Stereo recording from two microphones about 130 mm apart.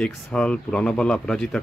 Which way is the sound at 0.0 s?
5° left (ahead or behind).